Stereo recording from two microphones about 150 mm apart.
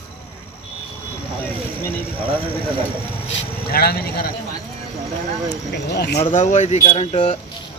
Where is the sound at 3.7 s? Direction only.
90° left.